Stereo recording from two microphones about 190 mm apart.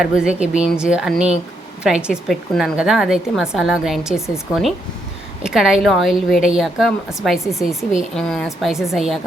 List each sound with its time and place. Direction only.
0.0 s a woman's voice: 5° right (ahead or behind)